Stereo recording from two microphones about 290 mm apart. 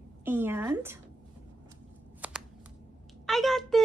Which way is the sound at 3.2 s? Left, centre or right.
Centre.